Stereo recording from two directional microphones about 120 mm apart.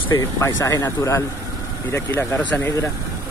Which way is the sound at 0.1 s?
25° left (ahead or behind).